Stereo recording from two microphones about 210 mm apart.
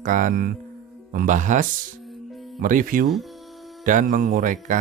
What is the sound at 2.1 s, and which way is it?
Music, centre (ahead or behind).